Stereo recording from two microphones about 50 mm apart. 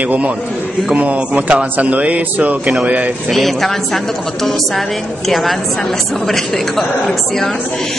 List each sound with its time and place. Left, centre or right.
0.9 s a man's voice: right
3.3 s a woman's voice: centre
5.3 s a woman's voice: centre